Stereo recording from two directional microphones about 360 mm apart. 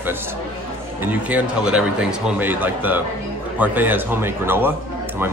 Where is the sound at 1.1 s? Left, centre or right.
Centre.